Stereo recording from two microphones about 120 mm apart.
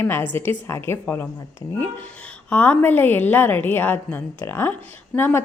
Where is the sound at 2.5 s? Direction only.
15° left (ahead or behind).